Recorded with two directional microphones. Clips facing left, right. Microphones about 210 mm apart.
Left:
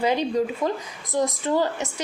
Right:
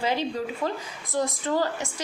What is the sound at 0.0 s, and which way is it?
A woman's voice, 15° left (ahead or behind).